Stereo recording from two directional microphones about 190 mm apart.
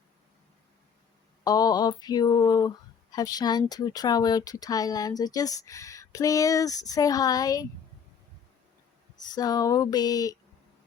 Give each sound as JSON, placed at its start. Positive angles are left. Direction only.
{"t": 1.5, "sound": "speech", "side_deg": 20}
{"t": 9.2, "sound": "speech", "side_deg": 20}